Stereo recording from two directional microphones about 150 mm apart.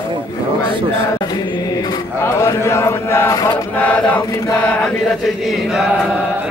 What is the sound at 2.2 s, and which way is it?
Chant, 20° left (ahead or behind).